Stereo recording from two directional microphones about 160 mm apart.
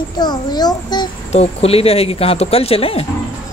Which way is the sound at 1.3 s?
40° left (ahead or behind).